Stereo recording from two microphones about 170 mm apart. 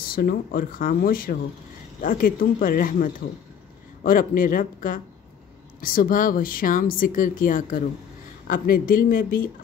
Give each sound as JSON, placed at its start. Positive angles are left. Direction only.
{"t": 0.1, "sound": "speech", "side_deg": 60}